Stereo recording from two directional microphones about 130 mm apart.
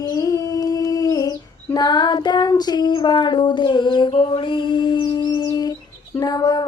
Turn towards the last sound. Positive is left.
turn(degrees=30)  # may be behind; listen again after turning